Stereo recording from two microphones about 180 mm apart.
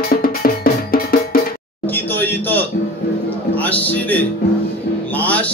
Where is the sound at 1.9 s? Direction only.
10° left (ahead or behind).